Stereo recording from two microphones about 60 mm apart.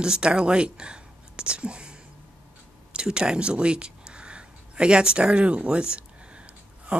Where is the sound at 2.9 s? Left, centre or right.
Centre.